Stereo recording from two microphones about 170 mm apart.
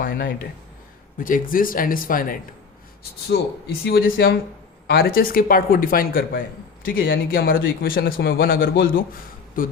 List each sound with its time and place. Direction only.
0.0 s speech: 55° left (ahead or behind)
3.0 s speech: 70° left (ahead or behind)